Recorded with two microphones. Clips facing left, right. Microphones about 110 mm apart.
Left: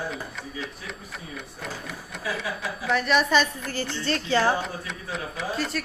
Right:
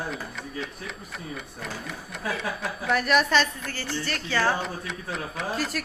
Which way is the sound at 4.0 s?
25° left (ahead or behind).